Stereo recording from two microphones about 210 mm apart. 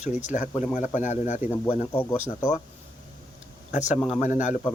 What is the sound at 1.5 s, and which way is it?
Speech, 10° left (ahead or behind).